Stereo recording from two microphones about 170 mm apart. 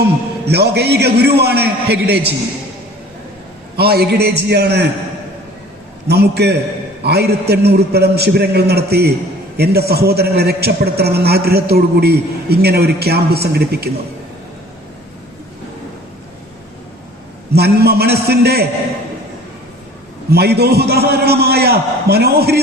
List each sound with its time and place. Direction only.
0.4 s a man's voice: 75° right (ahead or behind)
3.8 s a man's voice: 70° right (ahead or behind)
6.1 s a man's voice: 75° right (ahead or behind)
17.5 s a man's voice: 70° right (ahead or behind)
20.3 s a man's voice: 70° right (ahead or behind)